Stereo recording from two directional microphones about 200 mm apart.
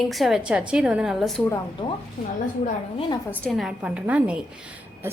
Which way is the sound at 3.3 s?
5° left (ahead or behind).